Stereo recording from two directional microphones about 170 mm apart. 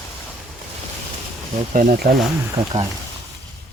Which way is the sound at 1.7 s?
60° right (ahead or behind).